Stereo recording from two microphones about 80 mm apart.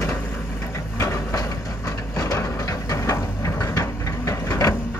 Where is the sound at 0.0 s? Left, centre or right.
Left.